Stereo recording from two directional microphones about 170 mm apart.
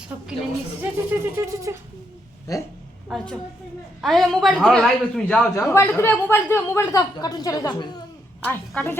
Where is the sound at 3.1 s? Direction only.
5° left (ahead or behind).